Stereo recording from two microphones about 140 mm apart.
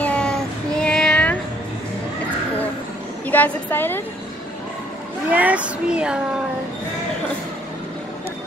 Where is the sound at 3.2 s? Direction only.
10° left (ahead or behind).